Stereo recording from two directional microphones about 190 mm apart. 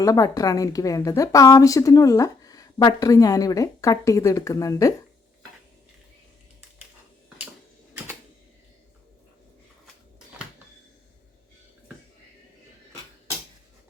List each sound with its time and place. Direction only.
0.0 s a woman's voice: 15° left (ahead or behind)